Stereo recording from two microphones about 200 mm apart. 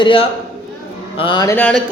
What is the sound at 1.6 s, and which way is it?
Speech, 5° left (ahead or behind).